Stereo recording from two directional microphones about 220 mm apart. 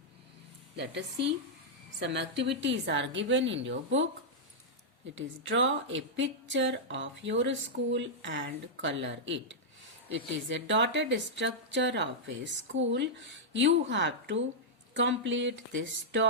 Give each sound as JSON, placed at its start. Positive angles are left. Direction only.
{"t": 0.8, "sound": "speech", "side_deg": -50}
{"t": 5.1, "sound": "speech", "side_deg": -55}